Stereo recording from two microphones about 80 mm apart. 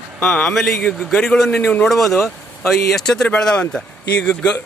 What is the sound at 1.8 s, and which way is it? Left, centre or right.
Speech, centre.